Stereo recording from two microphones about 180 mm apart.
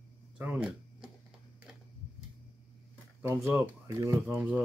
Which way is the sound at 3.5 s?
15° right (ahead or behind).